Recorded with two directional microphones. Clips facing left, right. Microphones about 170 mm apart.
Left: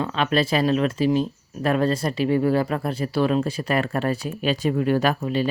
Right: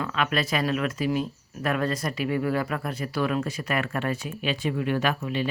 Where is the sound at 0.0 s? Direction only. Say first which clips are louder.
Left 5 dB; 30° left (ahead or behind).